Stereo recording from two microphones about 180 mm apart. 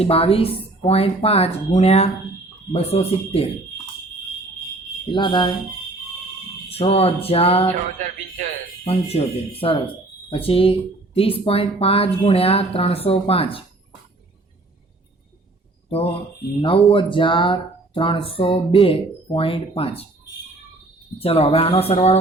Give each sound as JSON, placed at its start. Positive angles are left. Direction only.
{"t": 0.0, "sound": "speech", "side_deg": 35}
{"t": 5.0, "sound": "speech", "side_deg": 25}
{"t": 6.7, "sound": "speech", "side_deg": 35}
{"t": 8.8, "sound": "speech", "side_deg": 35}
{"t": 15.9, "sound": "speech", "side_deg": 35}
{"t": 21.2, "sound": "speech", "side_deg": 35}